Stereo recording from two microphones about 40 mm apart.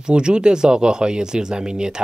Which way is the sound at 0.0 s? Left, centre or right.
Right.